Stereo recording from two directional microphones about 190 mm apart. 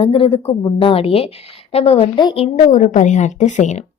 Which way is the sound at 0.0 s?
30° left (ahead or behind).